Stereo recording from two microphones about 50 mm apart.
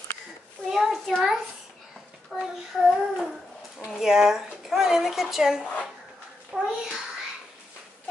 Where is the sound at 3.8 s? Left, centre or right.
Centre.